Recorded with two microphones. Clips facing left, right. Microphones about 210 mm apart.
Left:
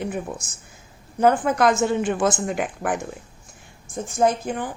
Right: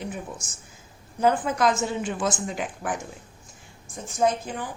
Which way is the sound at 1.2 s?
60° left (ahead or behind).